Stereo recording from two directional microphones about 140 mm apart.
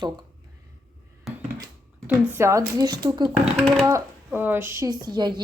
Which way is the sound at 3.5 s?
Centre (ahead or behind).